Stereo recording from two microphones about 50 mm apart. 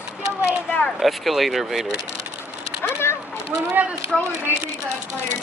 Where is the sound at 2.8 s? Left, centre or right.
Left.